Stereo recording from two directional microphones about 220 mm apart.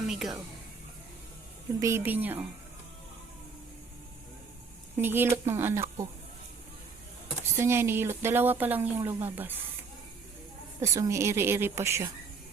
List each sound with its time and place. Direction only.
0.1 s speech: centre (ahead or behind)
1.8 s speech: 10° right (ahead or behind)
4.9 s speech: 10° right (ahead or behind)
7.5 s speech: 10° right (ahead or behind)
10.8 s speech: 15° right (ahead or behind)